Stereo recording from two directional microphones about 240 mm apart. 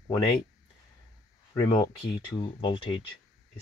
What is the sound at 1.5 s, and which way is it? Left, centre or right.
Speech, left.